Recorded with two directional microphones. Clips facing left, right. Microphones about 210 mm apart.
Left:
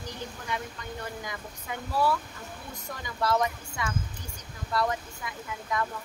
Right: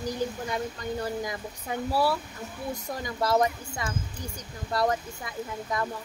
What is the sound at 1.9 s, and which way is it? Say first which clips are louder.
Speech: even; 35° right (ahead or behind).